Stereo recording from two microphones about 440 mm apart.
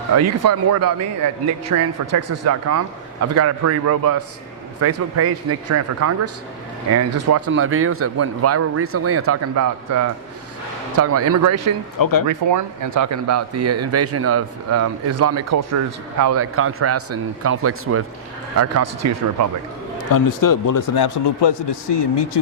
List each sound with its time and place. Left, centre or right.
0.2 s speech: right
11.9 s speech: left
12.3 s speech: right
20.1 s speech: left